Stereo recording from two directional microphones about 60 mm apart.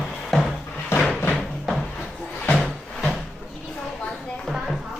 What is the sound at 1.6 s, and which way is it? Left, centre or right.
Music, centre.